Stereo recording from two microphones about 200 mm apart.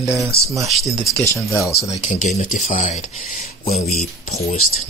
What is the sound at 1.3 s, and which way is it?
Speech, 15° left (ahead or behind).